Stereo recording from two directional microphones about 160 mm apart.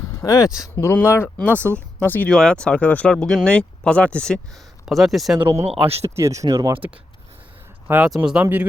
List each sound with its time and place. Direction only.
0.1 s speech: 20° left (ahead or behind); by 5.4 s centre (ahead or behind)
5.4 s speech: 15° right (ahead or behind)
7.9 s speech: 10° right (ahead or behind)